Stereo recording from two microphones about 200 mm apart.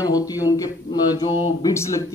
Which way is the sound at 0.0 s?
20° left (ahead or behind).